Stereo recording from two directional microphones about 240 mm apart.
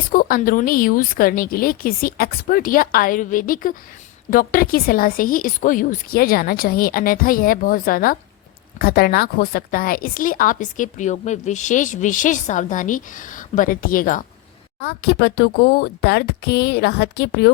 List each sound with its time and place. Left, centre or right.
0.1 s a woman's voice: left